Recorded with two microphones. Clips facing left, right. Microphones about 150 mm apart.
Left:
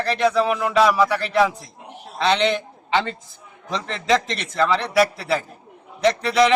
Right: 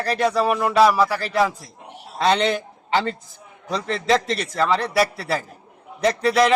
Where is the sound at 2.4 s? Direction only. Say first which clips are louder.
Left 1 dB; 5° right (ahead or behind).